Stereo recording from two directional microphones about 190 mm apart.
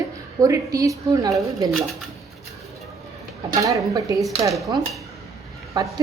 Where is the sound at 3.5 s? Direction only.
15° right (ahead or behind).